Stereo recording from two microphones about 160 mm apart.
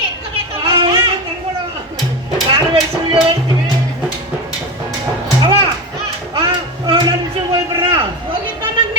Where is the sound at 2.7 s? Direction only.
35° right (ahead or behind).